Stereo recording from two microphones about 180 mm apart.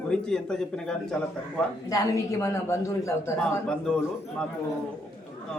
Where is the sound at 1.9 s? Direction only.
20° left (ahead or behind).